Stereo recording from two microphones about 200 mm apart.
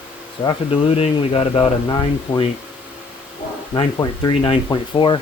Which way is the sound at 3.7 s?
20° left (ahead or behind).